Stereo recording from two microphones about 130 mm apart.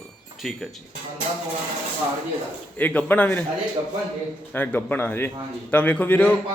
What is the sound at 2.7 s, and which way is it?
Speech, 15° left (ahead or behind).